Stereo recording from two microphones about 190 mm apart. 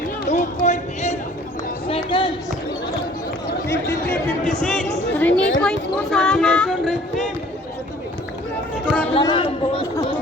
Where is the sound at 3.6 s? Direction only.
15° left (ahead or behind).